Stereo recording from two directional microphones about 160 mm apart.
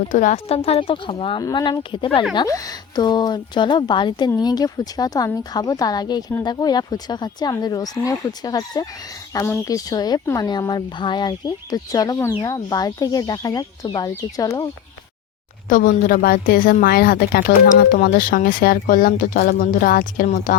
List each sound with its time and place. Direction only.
0.1 s speech: 50° left (ahead or behind)
0.5 s speech: 35° left (ahead or behind); by 14.7 s 20° left (ahead or behind)
15.7 s a woman's voice: 60° left (ahead or behind)
20.2 s speech: 45° left (ahead or behind)